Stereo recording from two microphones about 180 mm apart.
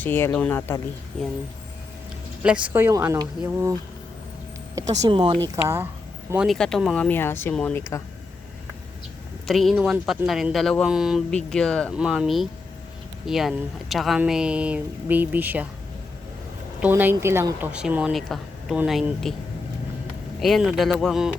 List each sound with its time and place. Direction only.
0.0 s speech: 10° left (ahead or behind)
2.4 s speech: 5° right (ahead or behind); by 5.4 s 25° right (ahead or behind)
5.6 s speech: 15° right (ahead or behind)
6.3 s speech: centre (ahead or behind)
9.5 s speech: centre (ahead or behind)
16.8 s speech: 10° right (ahead or behind)
20.4 s speech: centre (ahead or behind)